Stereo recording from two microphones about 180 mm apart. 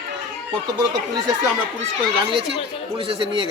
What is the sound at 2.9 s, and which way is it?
Speech, 30° right (ahead or behind).